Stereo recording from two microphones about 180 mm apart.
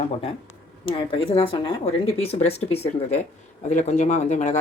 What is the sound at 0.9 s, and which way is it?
Speech, 30° left (ahead or behind).